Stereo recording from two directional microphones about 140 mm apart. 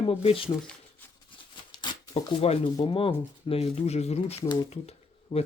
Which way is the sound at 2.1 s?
45° left (ahead or behind).